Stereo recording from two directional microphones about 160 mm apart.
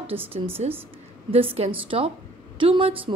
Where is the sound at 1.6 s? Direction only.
35° right (ahead or behind).